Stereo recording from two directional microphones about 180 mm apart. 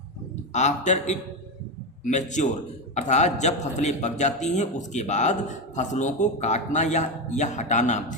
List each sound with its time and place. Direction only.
0.5 s a man's voice: 40° left (ahead or behind)